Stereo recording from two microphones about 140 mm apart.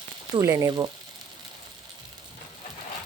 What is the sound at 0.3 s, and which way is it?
Speech, 25° right (ahead or behind).